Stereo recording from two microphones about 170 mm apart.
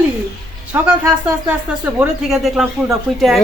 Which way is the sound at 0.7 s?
10° right (ahead or behind).